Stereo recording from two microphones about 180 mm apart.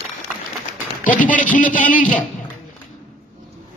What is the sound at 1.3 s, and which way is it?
Speech, 45° left (ahead or behind).